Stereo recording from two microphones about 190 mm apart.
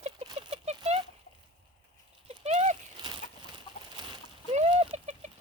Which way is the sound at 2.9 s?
25° right (ahead or behind).